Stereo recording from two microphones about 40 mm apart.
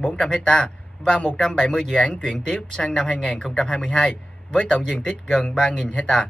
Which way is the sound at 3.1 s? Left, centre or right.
Left.